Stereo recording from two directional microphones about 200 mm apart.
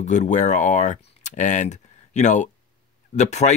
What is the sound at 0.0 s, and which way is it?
Speech, 35° left (ahead or behind).